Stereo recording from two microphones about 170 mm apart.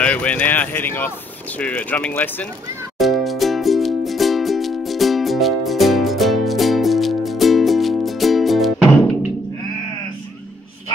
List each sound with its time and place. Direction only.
0.0 s speech: 10° left (ahead or behind)
3.0 s music: centre (ahead or behind)